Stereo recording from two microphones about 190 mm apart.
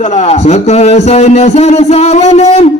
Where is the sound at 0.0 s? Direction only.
35° left (ahead or behind).